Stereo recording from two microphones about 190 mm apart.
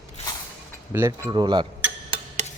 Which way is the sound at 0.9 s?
10° right (ahead or behind).